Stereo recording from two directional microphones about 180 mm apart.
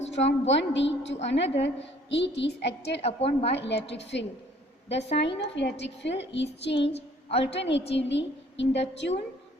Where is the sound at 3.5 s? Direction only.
70° left (ahead or behind).